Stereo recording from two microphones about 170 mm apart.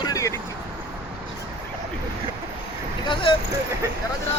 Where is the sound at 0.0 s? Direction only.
20° left (ahead or behind).